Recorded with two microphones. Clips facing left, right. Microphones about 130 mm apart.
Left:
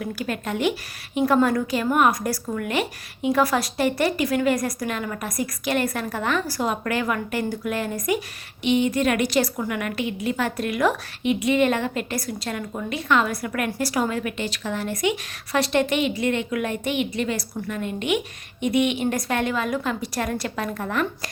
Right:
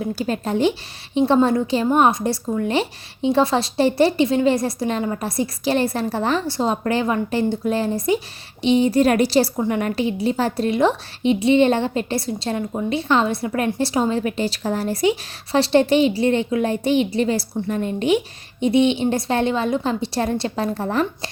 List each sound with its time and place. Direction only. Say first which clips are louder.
0.0 s a woman's voice: right 5 dB; 30° right (ahead or behind)